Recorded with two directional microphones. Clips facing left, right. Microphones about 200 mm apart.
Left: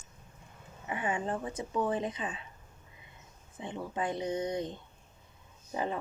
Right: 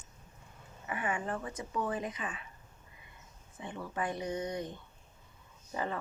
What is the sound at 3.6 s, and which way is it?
Speech, 20° left (ahead or behind).